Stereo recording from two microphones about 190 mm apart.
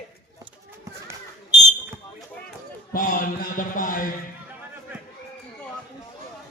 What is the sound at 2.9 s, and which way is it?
Speech, 45° left (ahead or behind).